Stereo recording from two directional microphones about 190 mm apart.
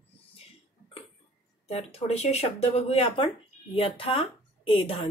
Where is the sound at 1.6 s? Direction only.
35° left (ahead or behind).